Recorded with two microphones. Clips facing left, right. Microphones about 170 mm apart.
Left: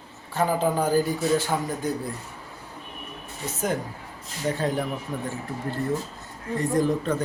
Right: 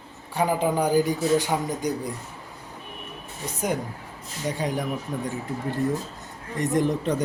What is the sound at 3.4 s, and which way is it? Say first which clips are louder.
A man's voice: even; 15° right (ahead or behind).